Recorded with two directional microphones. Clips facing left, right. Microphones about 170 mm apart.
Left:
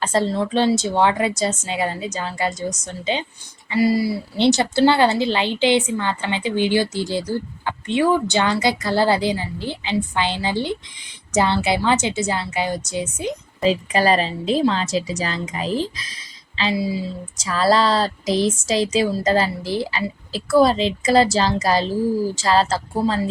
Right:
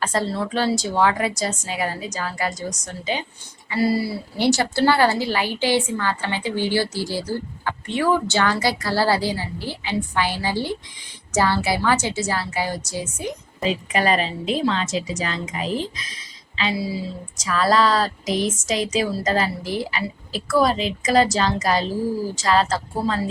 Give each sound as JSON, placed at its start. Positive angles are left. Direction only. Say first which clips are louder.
{"t": 0.0, "sound": "a woman's voice", "louder": "left 3 dB", "side_deg": 25}
{"t": 3.7, "sound": "a woman's voice", "louder": "left 3 dB", "side_deg": 15}
{"t": 13.7, "sound": "a woman's voice", "louder": "left 3 dB", "side_deg": 35}
{"t": 17.3, "sound": "a woman's voice", "louder": "left 2 dB", "side_deg": 30}